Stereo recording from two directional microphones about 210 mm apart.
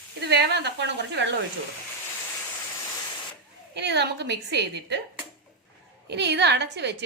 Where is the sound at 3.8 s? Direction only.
55° right (ahead or behind).